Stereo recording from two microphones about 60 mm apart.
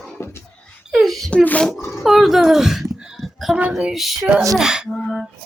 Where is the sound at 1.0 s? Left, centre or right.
Centre.